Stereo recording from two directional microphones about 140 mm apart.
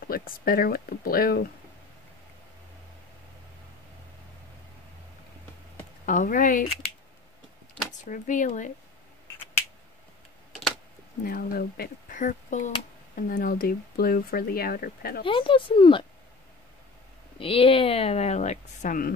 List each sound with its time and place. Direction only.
0.1 s speech: 90° left
6.0 s speech: 70° left (ahead or behind)
8.0 s speech: 65° left (ahead or behind)
11.2 s speech: 90° left; by 12.7 s 65° left (ahead or behind)
13.1 s speech: 90° left
15.2 s a woman's voice: 40° left (ahead or behind)
17.4 s speech: 40° left (ahead or behind); by 19.1 s 80° left